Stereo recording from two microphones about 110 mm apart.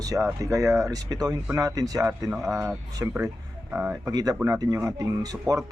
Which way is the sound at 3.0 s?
20° right (ahead or behind).